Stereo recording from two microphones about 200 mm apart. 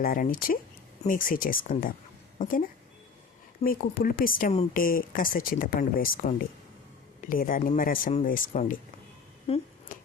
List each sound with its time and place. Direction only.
0.0 s a woman's voice: 45° left (ahead or behind)
3.6 s speech: 45° left (ahead or behind)
9.5 s speech: 30° left (ahead or behind)
9.9 s a sound: 40° left (ahead or behind)